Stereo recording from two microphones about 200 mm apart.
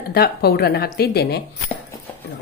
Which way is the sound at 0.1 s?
50° left (ahead or behind).